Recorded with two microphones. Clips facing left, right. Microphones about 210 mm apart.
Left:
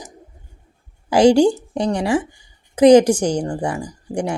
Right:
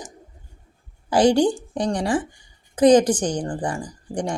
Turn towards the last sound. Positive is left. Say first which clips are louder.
# left 3 dB
turn(degrees=10)  # may be behind; listen again after turning